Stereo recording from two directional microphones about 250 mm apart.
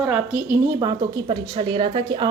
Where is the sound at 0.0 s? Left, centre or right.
Centre.